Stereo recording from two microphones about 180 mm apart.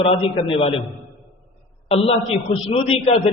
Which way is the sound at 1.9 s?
35° left (ahead or behind).